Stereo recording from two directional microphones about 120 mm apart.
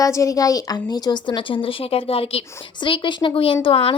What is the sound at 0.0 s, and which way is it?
Speech, 25° left (ahead or behind).